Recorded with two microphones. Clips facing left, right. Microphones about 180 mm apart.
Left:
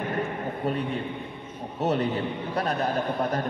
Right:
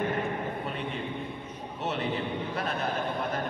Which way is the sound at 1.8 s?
40° left (ahead or behind).